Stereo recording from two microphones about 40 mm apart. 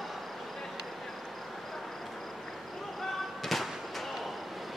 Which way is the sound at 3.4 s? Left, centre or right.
Centre.